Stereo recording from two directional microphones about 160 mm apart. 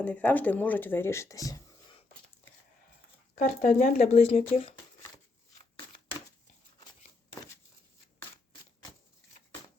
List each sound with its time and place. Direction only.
0.0 s speech: 10° left (ahead or behind)
3.3 s speech: 55° left (ahead or behind)